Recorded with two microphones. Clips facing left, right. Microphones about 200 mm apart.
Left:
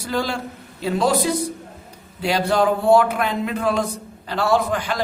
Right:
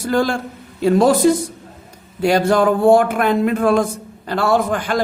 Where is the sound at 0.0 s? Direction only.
50° right (ahead or behind).